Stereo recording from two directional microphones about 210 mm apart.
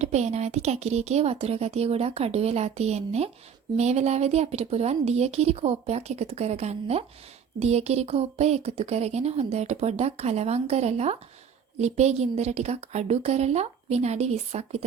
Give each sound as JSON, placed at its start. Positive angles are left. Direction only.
{"t": 0.0, "sound": "speech", "side_deg": -30}